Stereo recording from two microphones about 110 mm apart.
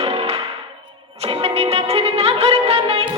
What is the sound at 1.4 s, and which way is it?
Music, 65° right (ahead or behind).